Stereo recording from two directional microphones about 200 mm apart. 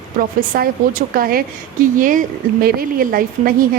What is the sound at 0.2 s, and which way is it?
A woman's voice, 45° right (ahead or behind).